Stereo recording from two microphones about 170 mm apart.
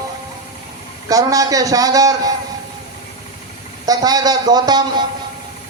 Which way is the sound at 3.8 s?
20° right (ahead or behind).